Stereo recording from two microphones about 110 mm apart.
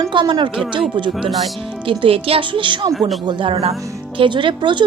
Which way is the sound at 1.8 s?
55° right (ahead or behind).